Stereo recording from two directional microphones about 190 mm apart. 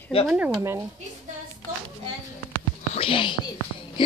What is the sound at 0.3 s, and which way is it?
Speech, 10° right (ahead or behind).